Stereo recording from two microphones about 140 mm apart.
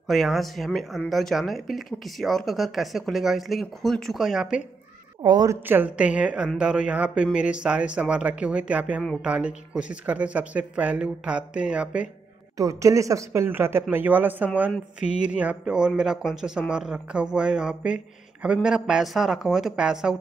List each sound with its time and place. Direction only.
0.1 s speech: centre (ahead or behind)
5.2 s a woman's voice: 30° right (ahead or behind)
5.7 s speech: 10° right (ahead or behind)
12.5 s speech: 25° right (ahead or behind); by 20.2 s 5° right (ahead or behind)